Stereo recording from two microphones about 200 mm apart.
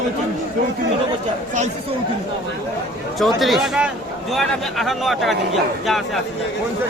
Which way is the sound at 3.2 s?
Centre (ahead or behind).